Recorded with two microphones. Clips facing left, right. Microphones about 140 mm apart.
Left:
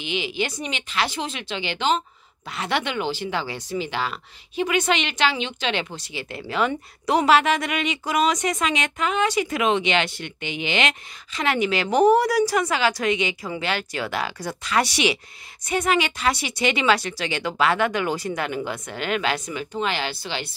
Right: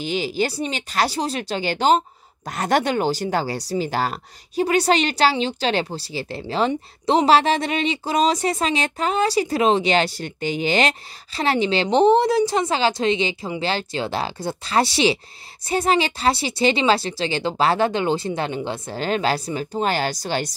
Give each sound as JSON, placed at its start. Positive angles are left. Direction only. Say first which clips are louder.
{"t": 0.0, "sound": "speech", "louder": "right 4 dB", "side_deg": -40}